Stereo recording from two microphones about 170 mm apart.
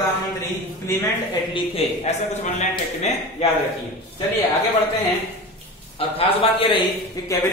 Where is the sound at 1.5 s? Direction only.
40° left (ahead or behind).